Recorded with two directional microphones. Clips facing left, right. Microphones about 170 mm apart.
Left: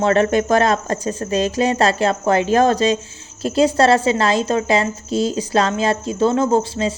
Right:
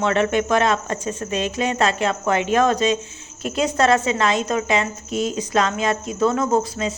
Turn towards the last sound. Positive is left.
turn(degrees=30)  # may be behind; listen again after turning